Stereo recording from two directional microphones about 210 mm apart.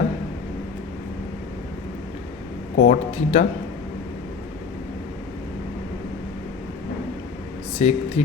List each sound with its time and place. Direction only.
2.7 s speech: 40° left (ahead or behind)
7.8 s speech: 30° left (ahead or behind)